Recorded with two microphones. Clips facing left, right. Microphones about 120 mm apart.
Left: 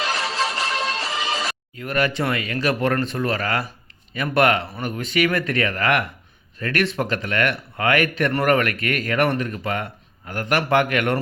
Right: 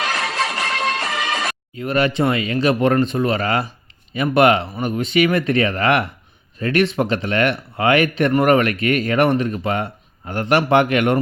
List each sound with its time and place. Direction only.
0.0 s music: 55° right (ahead or behind)
1.7 s speech: 25° right (ahead or behind)